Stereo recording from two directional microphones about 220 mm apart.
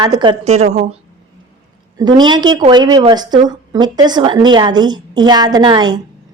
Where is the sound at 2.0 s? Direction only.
20° right (ahead or behind).